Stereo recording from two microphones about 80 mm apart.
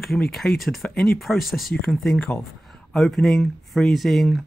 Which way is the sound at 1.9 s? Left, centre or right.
Centre.